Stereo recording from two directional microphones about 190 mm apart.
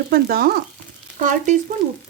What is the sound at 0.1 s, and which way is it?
Speech, 50° right (ahead or behind).